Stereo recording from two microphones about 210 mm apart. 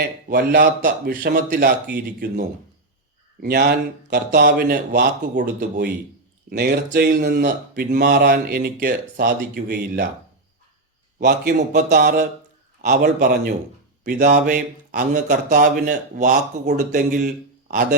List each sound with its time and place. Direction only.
0.0 s speech: 45° right (ahead or behind)
3.4 s speech: 45° right (ahead or behind)
11.2 s a man's voice: 45° right (ahead or behind)
11.9 s a man's voice: 50° right (ahead or behind)